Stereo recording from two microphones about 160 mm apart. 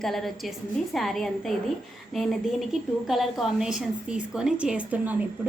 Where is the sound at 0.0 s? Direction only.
Centre (ahead or behind).